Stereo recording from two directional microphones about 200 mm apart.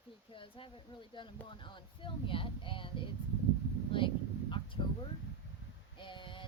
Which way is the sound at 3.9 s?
25° left (ahead or behind).